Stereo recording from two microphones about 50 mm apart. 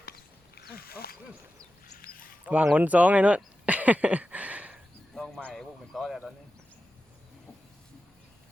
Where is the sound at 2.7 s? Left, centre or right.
Right.